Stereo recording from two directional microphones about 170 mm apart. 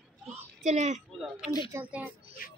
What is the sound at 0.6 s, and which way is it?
Speech, 45° right (ahead or behind).